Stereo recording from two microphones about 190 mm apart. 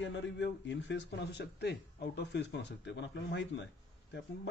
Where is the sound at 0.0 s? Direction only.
70° left (ahead or behind).